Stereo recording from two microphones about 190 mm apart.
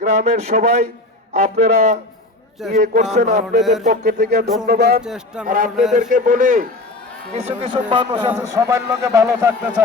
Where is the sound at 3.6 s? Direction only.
Centre (ahead or behind).